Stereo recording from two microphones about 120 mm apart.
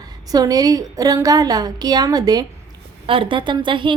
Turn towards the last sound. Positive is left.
turn(degrees=-45)  # may be behind; listen again after turning